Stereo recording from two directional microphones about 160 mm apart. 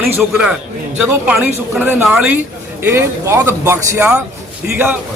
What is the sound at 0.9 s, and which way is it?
A man's voice, 10° right (ahead or behind).